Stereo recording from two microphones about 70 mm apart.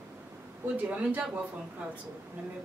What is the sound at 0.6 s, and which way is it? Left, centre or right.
Speech, centre.